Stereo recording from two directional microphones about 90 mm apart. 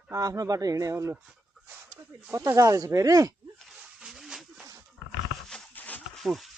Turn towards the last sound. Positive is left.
turn(degrees=0)  # may be behind; listen again after turning